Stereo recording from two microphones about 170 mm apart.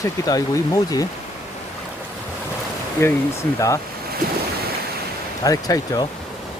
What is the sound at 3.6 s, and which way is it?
Speech, 20° left (ahead or behind).